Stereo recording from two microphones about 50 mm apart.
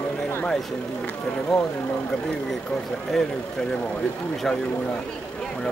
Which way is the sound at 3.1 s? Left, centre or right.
Centre.